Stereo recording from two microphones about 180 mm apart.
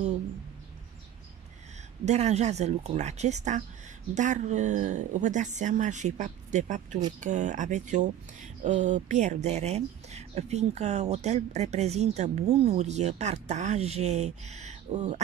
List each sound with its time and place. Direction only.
2.0 s speech: 40° right (ahead or behind)